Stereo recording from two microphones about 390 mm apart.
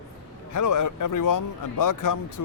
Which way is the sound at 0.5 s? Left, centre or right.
Left.